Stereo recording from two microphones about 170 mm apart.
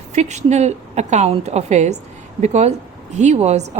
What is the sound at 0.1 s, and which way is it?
A woman's voice, 40° right (ahead or behind).